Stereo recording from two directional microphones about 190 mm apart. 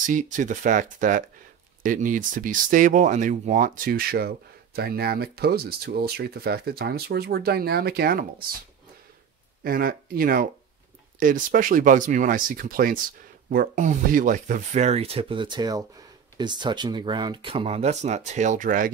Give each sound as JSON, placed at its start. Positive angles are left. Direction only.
{"t": 0.0, "sound": "speech", "side_deg": -40}
{"t": 9.6, "sound": "speech", "side_deg": -50}